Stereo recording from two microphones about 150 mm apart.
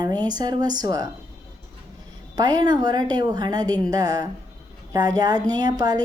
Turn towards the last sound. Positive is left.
turn(degrees=-25)  # may be behind; listen again after turning